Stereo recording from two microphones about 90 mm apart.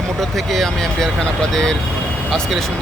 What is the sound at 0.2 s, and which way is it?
Speech, centre (ahead or behind).